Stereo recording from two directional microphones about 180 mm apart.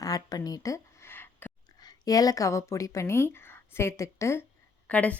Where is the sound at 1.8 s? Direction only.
20° left (ahead or behind).